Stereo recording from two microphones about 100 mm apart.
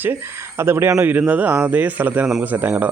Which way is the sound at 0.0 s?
25° right (ahead or behind).